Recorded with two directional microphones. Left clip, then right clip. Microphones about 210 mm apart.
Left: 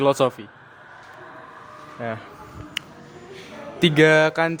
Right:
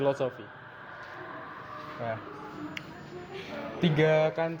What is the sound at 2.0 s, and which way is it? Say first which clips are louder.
Speech: left 5 dB; 40° left (ahead or behind).